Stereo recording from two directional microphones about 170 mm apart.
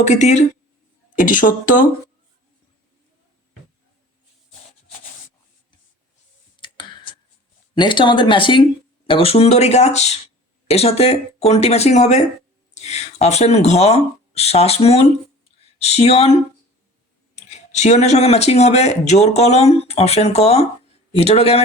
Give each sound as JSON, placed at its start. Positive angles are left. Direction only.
{"t": 0.0, "sound": "a woman's voice", "side_deg": 45}
{"t": 6.6, "sound": "clicking", "side_deg": 30}
{"t": 7.8, "sound": "speech", "side_deg": 30}